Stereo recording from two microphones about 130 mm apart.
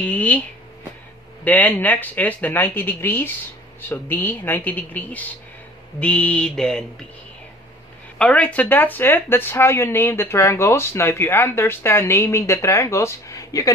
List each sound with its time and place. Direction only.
0.0 s speech: 10° left (ahead or behind)
1.4 s speech: 10° left (ahead or behind)
8.2 s speech: 10° left (ahead or behind); by 13.7 s 25° left (ahead or behind)